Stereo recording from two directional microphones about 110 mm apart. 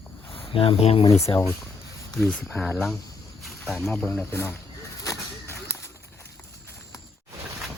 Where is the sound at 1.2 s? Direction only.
30° left (ahead or behind).